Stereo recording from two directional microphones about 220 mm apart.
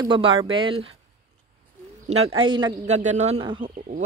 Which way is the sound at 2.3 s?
20° right (ahead or behind).